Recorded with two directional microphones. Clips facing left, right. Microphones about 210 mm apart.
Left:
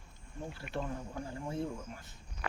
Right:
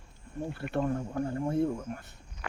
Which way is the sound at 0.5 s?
55° right (ahead or behind).